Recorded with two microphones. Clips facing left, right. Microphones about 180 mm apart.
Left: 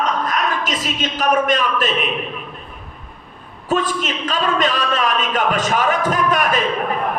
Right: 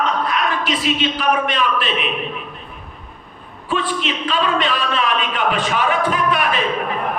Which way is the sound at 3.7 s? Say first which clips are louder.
Left 2 dB; 45° left (ahead or behind).